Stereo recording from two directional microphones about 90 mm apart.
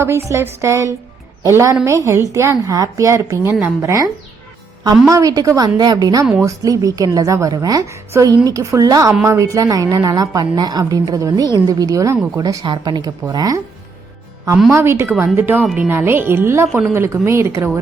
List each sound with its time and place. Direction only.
0.0 s a woman's voice: 30° right (ahead or behind)
12.6 s a woman's voice: 55° right (ahead or behind)
14.7 s a woman's voice: 30° right (ahead or behind)